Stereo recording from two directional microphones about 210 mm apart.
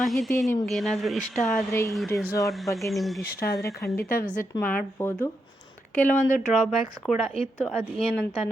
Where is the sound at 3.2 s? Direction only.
45° left (ahead or behind).